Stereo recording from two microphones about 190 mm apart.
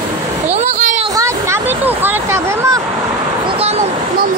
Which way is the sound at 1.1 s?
15° right (ahead or behind).